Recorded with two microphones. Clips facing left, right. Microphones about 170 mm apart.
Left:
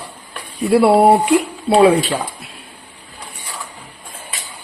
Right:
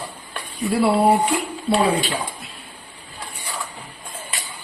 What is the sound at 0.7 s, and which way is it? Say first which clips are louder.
Speech: left 6 dB; 65° left (ahead or behind).